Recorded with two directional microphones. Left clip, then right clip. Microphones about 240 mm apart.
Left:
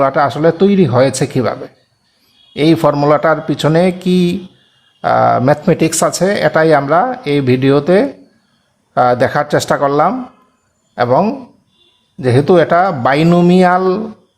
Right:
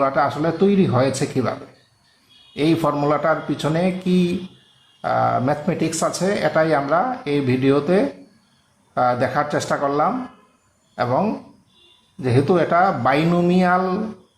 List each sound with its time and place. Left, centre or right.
0.0 s speech: left